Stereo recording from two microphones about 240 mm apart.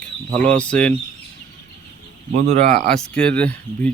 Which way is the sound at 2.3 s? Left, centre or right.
Right.